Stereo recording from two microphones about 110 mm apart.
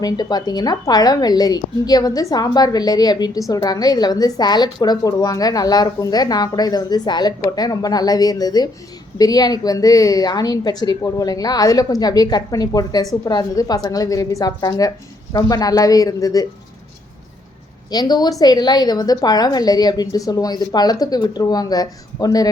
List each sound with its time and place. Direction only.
0.0 s a woman's voice: 35° left (ahead or behind)
17.9 s a woman's voice: 40° left (ahead or behind)